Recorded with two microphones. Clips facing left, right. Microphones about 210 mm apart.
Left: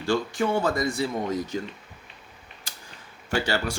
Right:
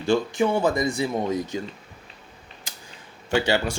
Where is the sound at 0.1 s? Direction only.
20° right (ahead or behind).